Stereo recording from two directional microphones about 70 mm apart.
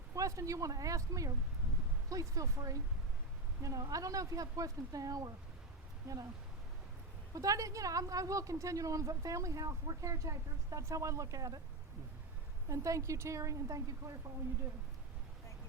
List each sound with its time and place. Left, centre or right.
0.1 s speech: right
7.3 s a woman's voice: right
12.6 s a woman's voice: right